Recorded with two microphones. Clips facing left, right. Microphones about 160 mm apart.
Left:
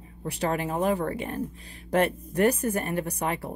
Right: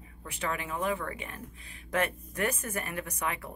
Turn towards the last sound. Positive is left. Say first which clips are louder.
# left 6 dB
turn(degrees=35)  # may be behind; listen again after turning